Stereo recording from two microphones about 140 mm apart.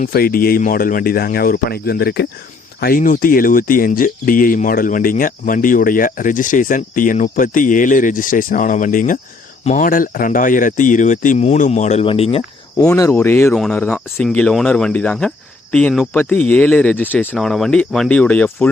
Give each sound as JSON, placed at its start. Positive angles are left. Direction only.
{"t": 0.0, "sound": "speech", "side_deg": 90}
{"t": 12.8, "sound": "speech", "side_deg": 20}
{"t": 17.3, "sound": "speech", "side_deg": 5}